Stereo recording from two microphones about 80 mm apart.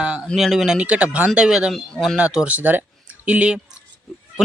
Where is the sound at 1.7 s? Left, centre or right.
Centre.